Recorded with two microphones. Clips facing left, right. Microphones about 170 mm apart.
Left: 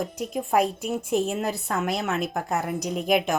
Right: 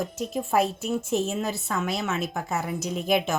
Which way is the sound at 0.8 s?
15° left (ahead or behind).